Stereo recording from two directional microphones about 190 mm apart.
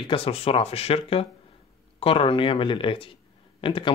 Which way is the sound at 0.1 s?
30° left (ahead or behind).